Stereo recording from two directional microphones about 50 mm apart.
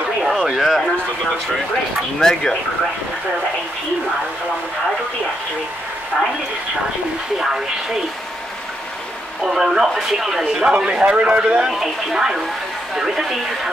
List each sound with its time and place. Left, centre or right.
0.2 s speech: centre
2.1 s speech: centre
7.3 s speech: centre
9.4 s a man's voice: centre
11.6 s speech: centre